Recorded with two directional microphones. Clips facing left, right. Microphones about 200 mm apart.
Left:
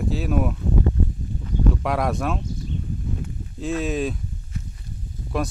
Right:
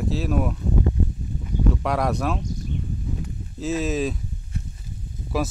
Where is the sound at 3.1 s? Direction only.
Centre (ahead or behind).